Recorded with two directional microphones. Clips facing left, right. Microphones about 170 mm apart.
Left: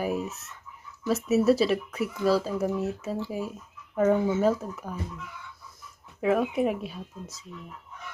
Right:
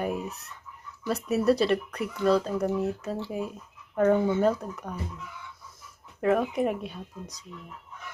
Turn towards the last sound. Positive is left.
turn(degrees=5)  # may be behind; listen again after turning